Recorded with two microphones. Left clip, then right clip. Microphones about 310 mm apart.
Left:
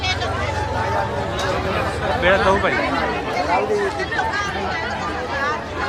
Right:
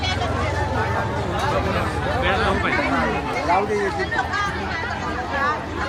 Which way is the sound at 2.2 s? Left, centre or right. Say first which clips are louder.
Left 6 dB; left.